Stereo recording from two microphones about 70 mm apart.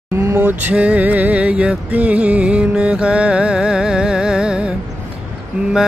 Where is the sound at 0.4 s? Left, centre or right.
Right.